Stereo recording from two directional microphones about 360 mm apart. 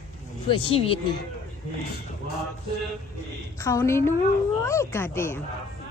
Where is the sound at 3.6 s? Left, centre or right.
Centre.